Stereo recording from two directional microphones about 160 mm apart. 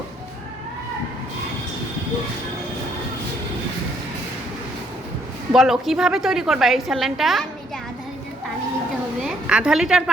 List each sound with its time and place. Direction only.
5.5 s a woman's voice: 5° right (ahead or behind)
9.2 s a woman's voice: 5° right (ahead or behind)